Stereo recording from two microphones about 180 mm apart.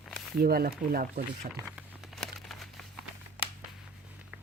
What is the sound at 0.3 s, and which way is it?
Speech, 55° right (ahead or behind).